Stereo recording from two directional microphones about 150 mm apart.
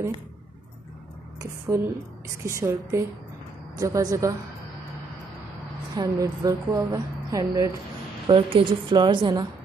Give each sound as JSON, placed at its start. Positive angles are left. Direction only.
{"t": 1.4, "sound": "speech", "side_deg": -20}
{"t": 5.9, "sound": "speech", "side_deg": -20}
{"t": 8.3, "sound": "a woman's voice", "side_deg": -35}